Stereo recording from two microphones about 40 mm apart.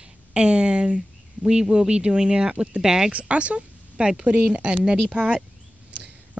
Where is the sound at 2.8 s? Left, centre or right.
Centre.